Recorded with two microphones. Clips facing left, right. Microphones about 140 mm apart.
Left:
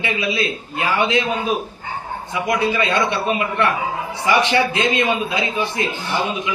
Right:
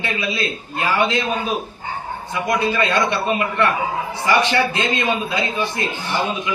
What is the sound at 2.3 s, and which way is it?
A man's voice, 20° left (ahead or behind).